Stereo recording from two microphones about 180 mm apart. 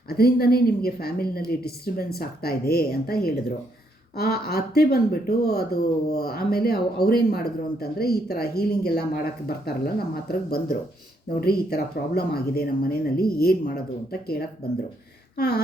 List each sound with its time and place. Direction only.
0.1 s speech: 60° left (ahead or behind)